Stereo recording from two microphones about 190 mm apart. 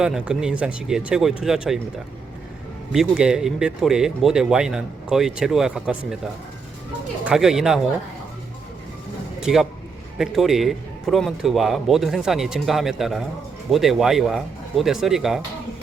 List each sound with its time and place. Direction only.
0.0 s speech: 5° right (ahead or behind)
2.9 s speech: 5° right (ahead or behind)
7.3 s speech: centre (ahead or behind)
9.4 s a man's voice: centre (ahead or behind)